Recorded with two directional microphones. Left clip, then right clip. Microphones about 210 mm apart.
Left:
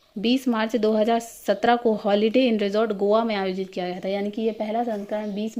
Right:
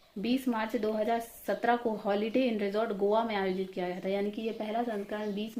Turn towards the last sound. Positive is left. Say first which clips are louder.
# left 7 dB
turn(degrees=35)  # may be behind; listen again after turning